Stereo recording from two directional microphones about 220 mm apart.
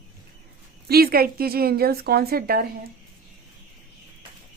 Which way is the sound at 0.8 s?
45° right (ahead or behind).